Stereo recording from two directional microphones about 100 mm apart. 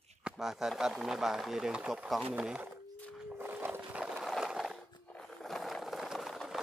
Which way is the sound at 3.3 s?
20° right (ahead or behind).